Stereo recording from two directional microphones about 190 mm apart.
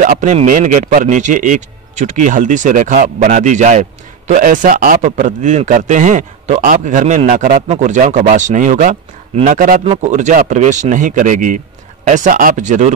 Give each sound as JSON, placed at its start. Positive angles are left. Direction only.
{"t": 0.0, "sound": "a man's voice", "side_deg": -40}